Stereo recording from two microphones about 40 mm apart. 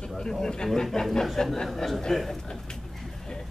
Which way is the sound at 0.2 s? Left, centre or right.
Centre.